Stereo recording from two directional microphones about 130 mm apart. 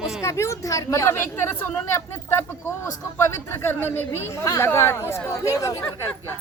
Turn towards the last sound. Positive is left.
turn(degrees=20)  # may be behind; listen again after turning